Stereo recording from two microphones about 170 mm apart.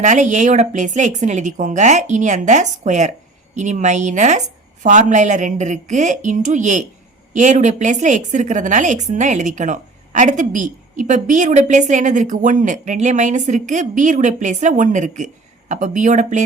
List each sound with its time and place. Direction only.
0.0 s a woman's voice: 45° right (ahead or behind)